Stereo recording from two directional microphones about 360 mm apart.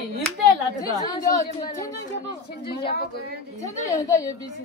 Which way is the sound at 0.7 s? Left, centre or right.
Centre.